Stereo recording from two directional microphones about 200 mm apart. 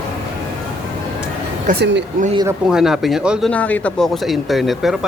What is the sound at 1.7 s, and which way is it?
Speech, 40° right (ahead or behind).